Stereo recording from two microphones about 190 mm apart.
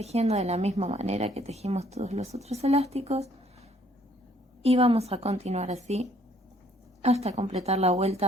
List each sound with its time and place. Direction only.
0.0 s a woman's voice: 35° right (ahead or behind)
4.6 s a woman's voice: 30° right (ahead or behind)
7.0 s a woman's voice: 35° right (ahead or behind)